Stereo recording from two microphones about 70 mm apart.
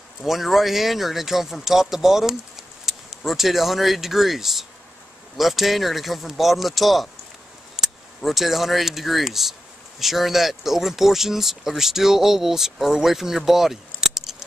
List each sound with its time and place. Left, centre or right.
0.2 s speech: centre
13.5 s keys jangling: centre